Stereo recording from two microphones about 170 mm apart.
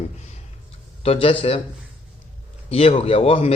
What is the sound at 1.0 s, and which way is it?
Speech, 35° left (ahead or behind).